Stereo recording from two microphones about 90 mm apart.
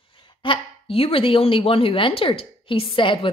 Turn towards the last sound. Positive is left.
turn(degrees=70)  # may be behind; listen again after turning